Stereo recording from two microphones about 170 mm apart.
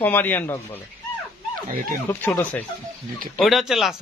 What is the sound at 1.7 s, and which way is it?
Speech, 55° right (ahead or behind).